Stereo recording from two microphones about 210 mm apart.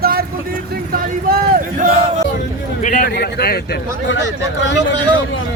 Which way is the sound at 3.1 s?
50° left (ahead or behind).